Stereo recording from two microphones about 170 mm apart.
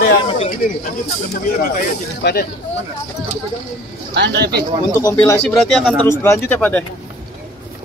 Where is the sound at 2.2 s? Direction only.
75° left (ahead or behind).